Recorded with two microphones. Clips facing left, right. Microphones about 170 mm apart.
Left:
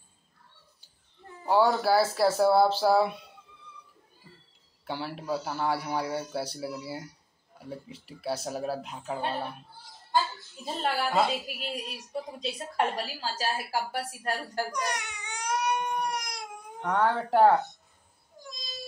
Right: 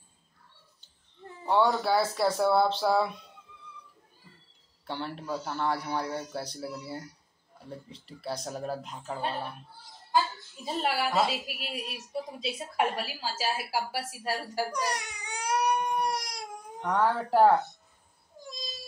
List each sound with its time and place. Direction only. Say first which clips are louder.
1.5 s a woman's voice: left 2 dB; 5° left (ahead or behind)
4.8 s a woman's voice: left 2 dB; 5° left (ahead or behind)
10.6 s a woman's voice: even; 5° right (ahead or behind)
14.7 s baby cry: right 1 dB; 35° right (ahead or behind)
16.0 s crying: right 2 dB; 35° right (ahead or behind)
16.8 s a woman's voice: left 1 dB; 5° right (ahead or behind)